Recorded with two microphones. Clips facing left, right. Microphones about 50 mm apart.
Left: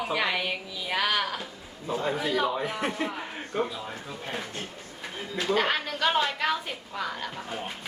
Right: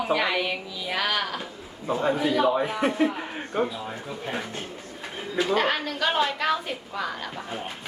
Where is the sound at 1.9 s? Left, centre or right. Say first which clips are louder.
Right 4 dB; right.